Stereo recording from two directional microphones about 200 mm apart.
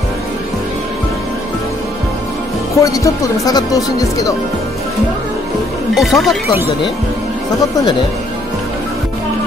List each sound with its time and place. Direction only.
2.8 s speech: 15° left (ahead or behind)
5.9 s speech: centre (ahead or behind)